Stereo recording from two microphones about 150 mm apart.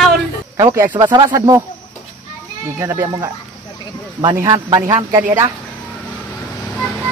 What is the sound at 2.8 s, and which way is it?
Speech, 20° right (ahead or behind).